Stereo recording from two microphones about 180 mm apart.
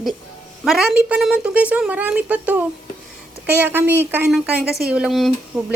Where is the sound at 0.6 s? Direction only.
Centre (ahead or behind).